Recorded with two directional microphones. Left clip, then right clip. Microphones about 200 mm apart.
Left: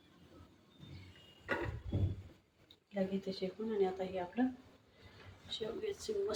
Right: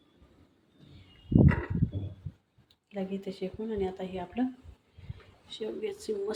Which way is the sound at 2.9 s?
30° right (ahead or behind).